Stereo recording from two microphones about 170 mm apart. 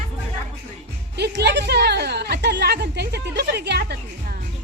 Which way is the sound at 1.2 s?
85° right.